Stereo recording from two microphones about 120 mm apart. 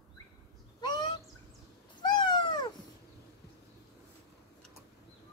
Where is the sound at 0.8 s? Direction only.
35° left (ahead or behind).